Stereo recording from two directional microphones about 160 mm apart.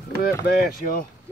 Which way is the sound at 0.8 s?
60° left (ahead or behind).